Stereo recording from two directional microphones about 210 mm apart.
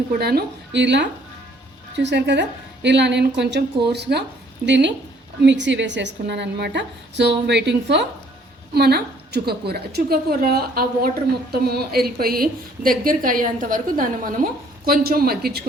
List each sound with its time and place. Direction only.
0.1 s a woman's voice: 50° right (ahead or behind)